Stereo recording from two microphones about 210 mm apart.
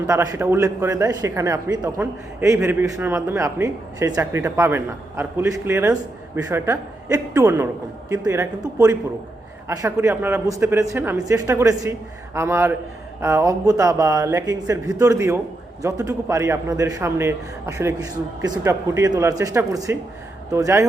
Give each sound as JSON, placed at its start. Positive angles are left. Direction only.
{"t": 0.1, "sound": "a man's voice", "side_deg": -15}